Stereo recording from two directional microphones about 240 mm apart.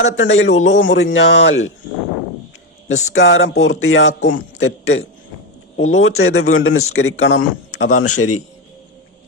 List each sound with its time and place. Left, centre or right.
0.2 s a man's voice: left
0.5 s a man's voice: left
0.8 s speech: left
2.9 s a man's voice: left
7.9 s a man's voice: left